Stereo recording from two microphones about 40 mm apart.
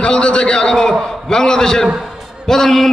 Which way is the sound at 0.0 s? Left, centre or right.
Left.